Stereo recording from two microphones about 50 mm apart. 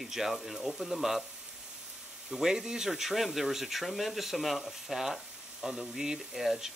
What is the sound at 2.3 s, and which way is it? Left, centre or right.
Speech, centre.